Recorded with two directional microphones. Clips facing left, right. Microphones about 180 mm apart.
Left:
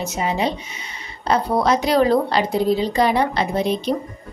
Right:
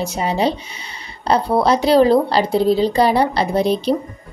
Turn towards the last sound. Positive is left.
turn(degrees=-35)  # may be behind; listen again after turning